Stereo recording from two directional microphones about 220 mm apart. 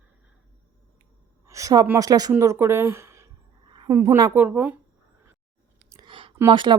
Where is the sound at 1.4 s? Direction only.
15° right (ahead or behind).